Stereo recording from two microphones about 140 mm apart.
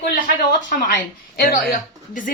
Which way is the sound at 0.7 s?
90° left.